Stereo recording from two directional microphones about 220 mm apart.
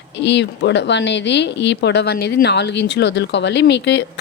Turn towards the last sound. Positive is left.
turn(degrees=50)  # may be behind; listen again after turning